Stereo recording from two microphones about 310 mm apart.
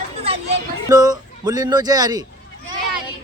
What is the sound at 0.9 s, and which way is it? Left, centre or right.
Speech, centre.